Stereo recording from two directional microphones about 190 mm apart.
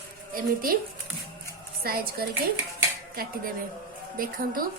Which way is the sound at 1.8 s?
50° right (ahead or behind).